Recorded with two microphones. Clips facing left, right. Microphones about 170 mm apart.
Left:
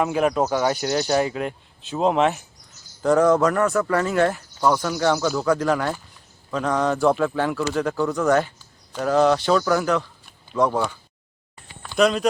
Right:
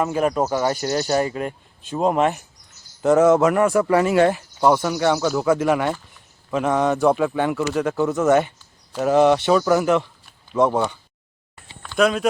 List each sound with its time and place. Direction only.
0.0 s speech: centre (ahead or behind)
6.5 s speech: 15° right (ahead or behind)
7.7 s speech: 5° right (ahead or behind)
7.9 s speech: 20° right (ahead or behind)
8.9 s speech: 5° right (ahead or behind)
11.9 s speech: centre (ahead or behind)